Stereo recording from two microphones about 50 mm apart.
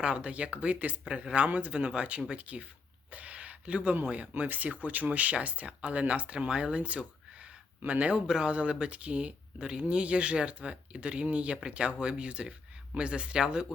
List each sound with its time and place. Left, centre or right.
0.0 s speech: right
3.1 s a sound: right
4.0 s speech: right